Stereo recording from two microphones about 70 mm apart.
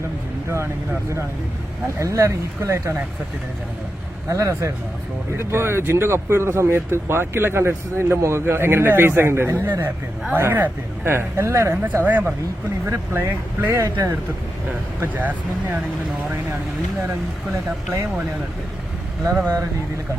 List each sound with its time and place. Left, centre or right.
2.0 s speech: right
4.3 s speech: right
12.8 s speech: right
15.0 s speech: right
19.2 s speech: right